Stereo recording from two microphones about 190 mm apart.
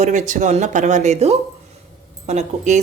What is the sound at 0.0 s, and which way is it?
A woman's voice, 40° right (ahead or behind).